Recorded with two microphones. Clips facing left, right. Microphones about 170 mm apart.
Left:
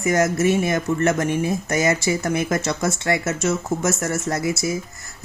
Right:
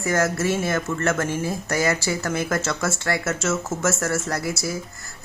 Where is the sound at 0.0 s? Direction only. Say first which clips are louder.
Left 3 dB; 20° left (ahead or behind).